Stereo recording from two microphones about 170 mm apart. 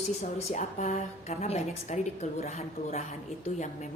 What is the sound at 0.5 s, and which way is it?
A woman's voice, 45° left (ahead or behind).